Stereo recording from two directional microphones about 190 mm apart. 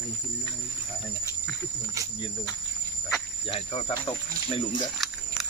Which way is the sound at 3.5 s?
30° left (ahead or behind).